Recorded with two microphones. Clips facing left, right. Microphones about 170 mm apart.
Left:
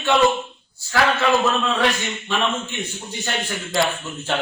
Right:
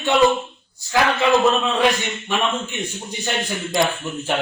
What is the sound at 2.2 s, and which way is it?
A man's voice, 15° right (ahead or behind).